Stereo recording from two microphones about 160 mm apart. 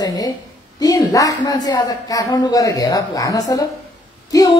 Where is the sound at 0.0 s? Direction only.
25° left (ahead or behind).